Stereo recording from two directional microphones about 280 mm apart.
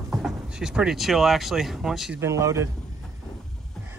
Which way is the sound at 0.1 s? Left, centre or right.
Centre.